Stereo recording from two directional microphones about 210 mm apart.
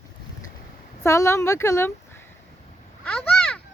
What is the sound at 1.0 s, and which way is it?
Speech, 15° left (ahead or behind).